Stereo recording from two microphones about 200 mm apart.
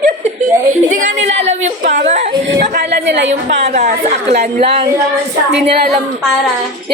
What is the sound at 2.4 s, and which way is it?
Speech, 60° right (ahead or behind).